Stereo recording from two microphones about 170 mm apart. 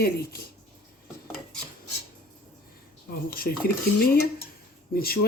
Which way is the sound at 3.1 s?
60° left (ahead or behind).